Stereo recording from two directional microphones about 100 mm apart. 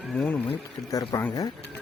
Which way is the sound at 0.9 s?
35° left (ahead or behind).